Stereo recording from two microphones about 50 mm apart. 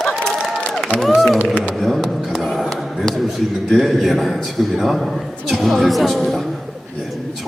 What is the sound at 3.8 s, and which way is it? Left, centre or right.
A woman's voice, centre.